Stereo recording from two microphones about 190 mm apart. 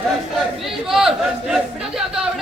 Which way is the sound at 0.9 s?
Centre (ahead or behind).